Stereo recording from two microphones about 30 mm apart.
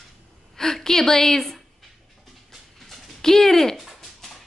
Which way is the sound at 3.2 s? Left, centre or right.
Centre.